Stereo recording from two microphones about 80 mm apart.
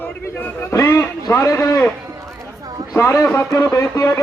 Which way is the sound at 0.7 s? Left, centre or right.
Left.